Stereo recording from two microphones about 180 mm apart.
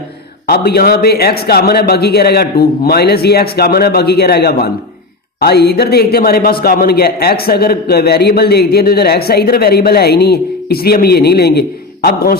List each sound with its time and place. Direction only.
0.4 s a man's voice: 60° left (ahead or behind)